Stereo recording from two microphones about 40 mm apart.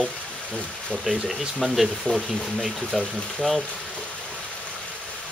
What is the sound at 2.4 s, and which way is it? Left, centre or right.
Speech, centre.